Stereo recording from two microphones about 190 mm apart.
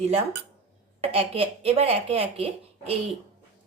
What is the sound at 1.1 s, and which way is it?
Speech, 30° right (ahead or behind).